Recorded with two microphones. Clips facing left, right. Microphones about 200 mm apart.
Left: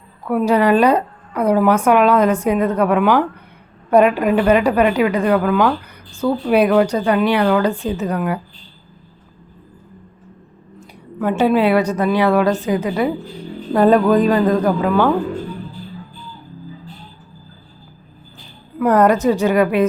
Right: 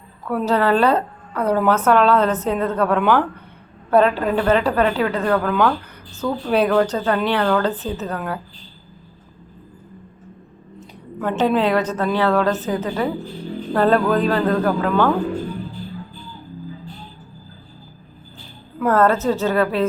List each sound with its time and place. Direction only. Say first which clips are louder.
0.3 s a woman's voice: left 4 dB; 10° left (ahead or behind)
10.8 s a woman's voice: left 4 dB; 10° left (ahead or behind)
18.9 s a woman's voice: left 3 dB; 15° left (ahead or behind)